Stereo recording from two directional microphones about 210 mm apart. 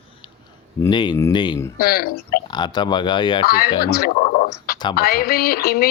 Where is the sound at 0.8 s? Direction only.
20° left (ahead or behind).